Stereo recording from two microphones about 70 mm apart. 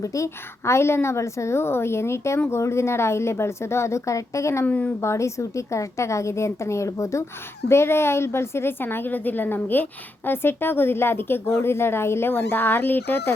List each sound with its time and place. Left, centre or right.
0.0 s a woman's voice: left
4.6 s a woman's voice: left
4.9 s a woman's voice: left
7.7 s a woman's voice: left